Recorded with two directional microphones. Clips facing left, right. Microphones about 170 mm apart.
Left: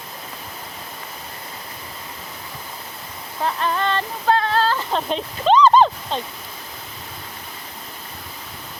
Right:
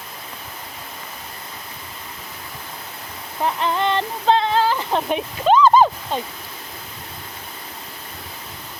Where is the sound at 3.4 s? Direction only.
20° right (ahead or behind).